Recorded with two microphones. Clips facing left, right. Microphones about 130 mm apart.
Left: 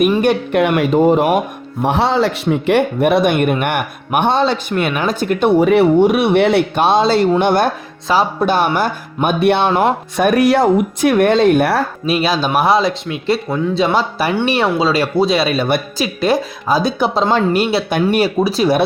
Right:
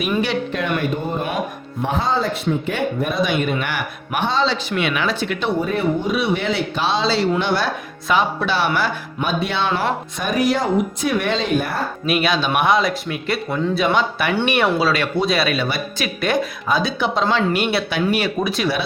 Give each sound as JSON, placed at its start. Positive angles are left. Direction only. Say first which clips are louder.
{"t": 0.2, "sound": "speech", "louder": "left 7 dB", "side_deg": 50}
{"t": 0.6, "sound": "speech", "louder": "left 10 dB", "side_deg": 85}
{"t": 1.8, "sound": "speech", "louder": "left 6 dB", "side_deg": 75}
{"t": 5.5, "sound": "speech", "louder": "left 12 dB", "side_deg": 75}
{"t": 8.0, "sound": "speech", "louder": "left 4 dB", "side_deg": 35}
{"t": 12.0, "sound": "speech", "louder": "even", "side_deg": 30}
{"t": 15.5, "sound": "speech", "louder": "left 7 dB", "side_deg": 50}
{"t": 16.0, "sound": "speech", "louder": "left 1 dB", "side_deg": 30}
{"t": 18.4, "sound": "speech", "louder": "left 6 dB", "side_deg": 35}